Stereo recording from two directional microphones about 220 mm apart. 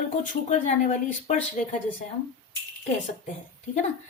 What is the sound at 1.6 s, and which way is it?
Speech, 35° left (ahead or behind).